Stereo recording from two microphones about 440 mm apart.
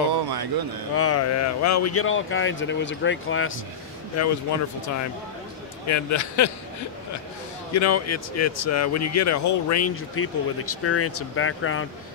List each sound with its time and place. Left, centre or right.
0.1 s a sound: right
0.9 s speech: left
5.9 s speech: left
7.7 s speech: left